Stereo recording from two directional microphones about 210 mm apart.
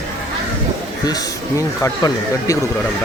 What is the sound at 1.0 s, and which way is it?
Speech, 20° left (ahead or behind).